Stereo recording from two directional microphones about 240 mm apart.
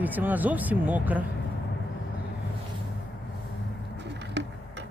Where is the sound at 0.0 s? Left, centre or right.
Centre.